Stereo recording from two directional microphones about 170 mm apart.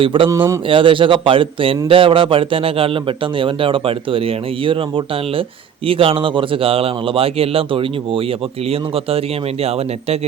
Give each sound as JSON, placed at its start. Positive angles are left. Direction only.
{"t": 0.0, "sound": "a man's voice", "side_deg": -30}
{"t": 0.3, "sound": "speech", "side_deg": -20}
{"t": 0.7, "sound": "a man's voice", "side_deg": -30}